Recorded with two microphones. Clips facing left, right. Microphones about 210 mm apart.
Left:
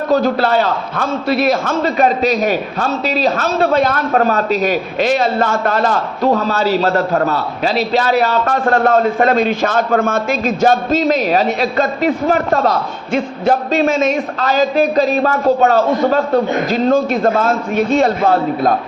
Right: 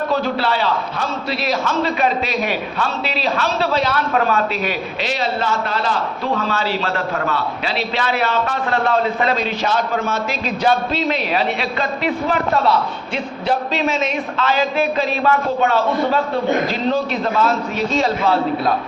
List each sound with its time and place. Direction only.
0.1 s a man's voice: 45° left (ahead or behind)